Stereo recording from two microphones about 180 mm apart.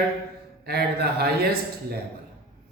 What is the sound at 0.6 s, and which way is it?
Speech, 60° right (ahead or behind).